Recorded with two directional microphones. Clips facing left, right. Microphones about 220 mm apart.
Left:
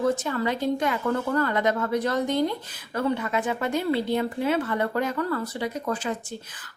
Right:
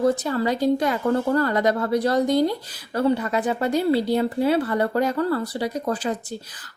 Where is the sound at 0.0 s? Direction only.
35° right (ahead or behind).